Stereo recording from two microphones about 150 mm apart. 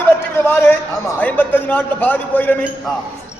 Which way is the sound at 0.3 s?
15° left (ahead or behind).